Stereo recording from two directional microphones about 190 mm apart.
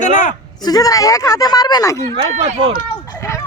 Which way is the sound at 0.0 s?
40° left (ahead or behind).